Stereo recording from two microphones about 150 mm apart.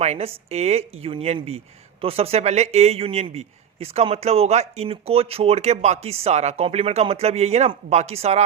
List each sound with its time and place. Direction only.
0.0 s speech: 45° right (ahead or behind)